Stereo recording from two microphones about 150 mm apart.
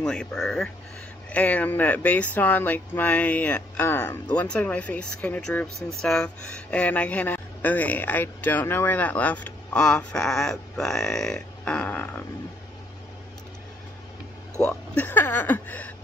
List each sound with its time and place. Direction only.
0.0 s speech: 5° left (ahead or behind)
14.6 s speech: 10° left (ahead or behind)